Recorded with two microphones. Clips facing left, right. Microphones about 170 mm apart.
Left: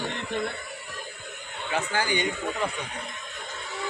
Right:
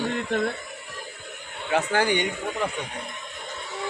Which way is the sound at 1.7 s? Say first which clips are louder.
Right 5 dB; 65° right (ahead or behind).